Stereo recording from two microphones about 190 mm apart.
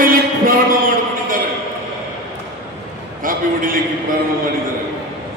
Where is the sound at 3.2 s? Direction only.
45° right (ahead or behind).